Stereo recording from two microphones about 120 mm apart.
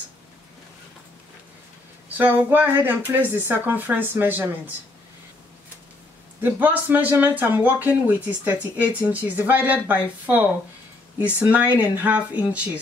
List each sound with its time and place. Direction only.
2.0 s speech: 15° right (ahead or behind)
6.4 s speech: 15° right (ahead or behind)